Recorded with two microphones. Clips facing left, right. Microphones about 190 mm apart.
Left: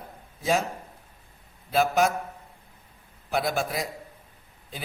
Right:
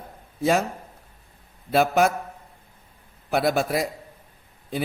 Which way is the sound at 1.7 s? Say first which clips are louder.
Right 3 dB; 60° right (ahead or behind).